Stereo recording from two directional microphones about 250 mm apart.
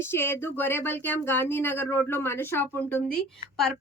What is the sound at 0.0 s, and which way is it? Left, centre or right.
Speech, centre.